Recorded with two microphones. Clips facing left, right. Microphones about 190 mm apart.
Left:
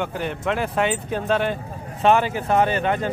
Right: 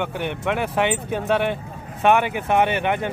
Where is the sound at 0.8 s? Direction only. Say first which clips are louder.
Right 1 dB; 70° right (ahead or behind).